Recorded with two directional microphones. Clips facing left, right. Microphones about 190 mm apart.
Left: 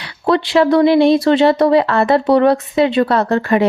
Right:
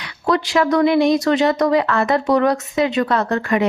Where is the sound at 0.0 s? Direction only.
25° left (ahead or behind).